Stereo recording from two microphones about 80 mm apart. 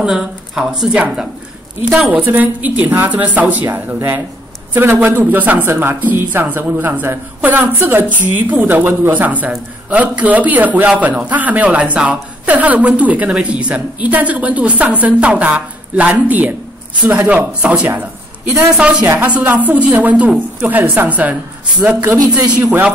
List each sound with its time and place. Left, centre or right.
0.0 s a woman's voice: centre
21.8 s speech: right
22.7 s a woman's voice: centre